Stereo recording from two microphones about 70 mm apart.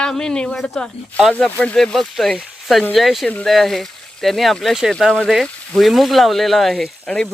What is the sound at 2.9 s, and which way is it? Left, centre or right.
Speech, centre.